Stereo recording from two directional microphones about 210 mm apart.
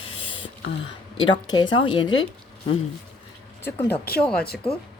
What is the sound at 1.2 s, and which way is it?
A woman's voice, 20° left (ahead or behind).